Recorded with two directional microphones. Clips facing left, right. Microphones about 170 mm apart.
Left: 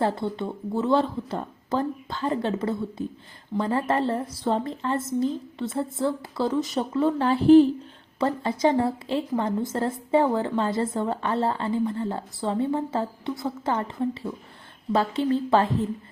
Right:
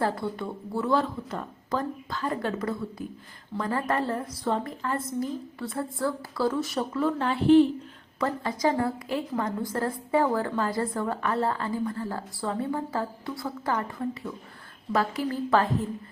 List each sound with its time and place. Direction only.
0.0 s a woman's voice: 25° left (ahead or behind)